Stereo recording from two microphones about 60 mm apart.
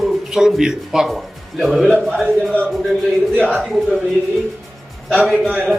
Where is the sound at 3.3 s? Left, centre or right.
Right.